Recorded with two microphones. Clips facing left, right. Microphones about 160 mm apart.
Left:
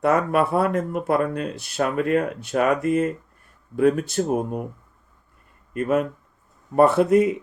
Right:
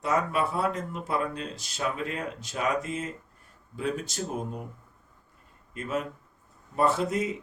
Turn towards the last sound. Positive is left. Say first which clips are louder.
# left 9 dB
turn(degrees=60)  # may be behind; listen again after turning